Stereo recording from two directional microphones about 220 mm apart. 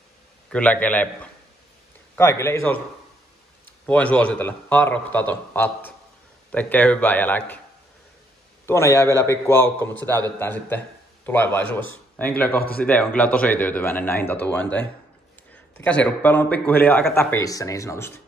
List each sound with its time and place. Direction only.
0.5 s a man's voice: 5° left (ahead or behind)
3.8 s a man's voice: 5° left (ahead or behind)
8.6 s a man's voice: 10° left (ahead or behind)
12.5 s a man's voice: 45° left (ahead or behind)
12.8 s a man's voice: 5° left (ahead or behind)